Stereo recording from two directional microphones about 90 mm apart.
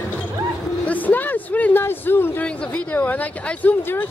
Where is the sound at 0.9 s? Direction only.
20° left (ahead or behind).